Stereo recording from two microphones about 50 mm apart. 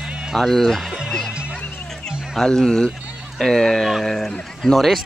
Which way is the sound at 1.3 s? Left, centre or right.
Right.